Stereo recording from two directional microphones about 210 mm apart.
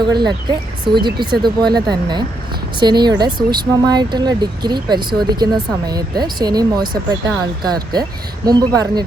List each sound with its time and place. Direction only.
0.0 s speech: 20° right (ahead or behind)